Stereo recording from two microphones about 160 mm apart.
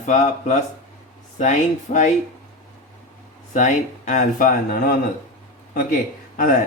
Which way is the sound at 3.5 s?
50° left (ahead or behind).